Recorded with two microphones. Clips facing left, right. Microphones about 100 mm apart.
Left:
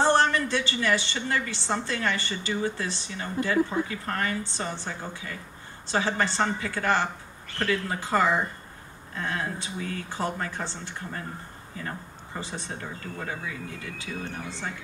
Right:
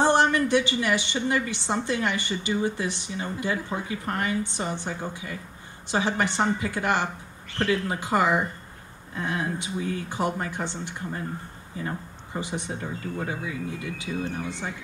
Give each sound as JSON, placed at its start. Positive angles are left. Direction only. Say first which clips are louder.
{"t": 0.0, "sound": "a woman's voice", "louder": "right 1 dB", "side_deg": -15}
{"t": 12.4, "sound": "a woman's voice", "louder": "right 4 dB", "side_deg": -15}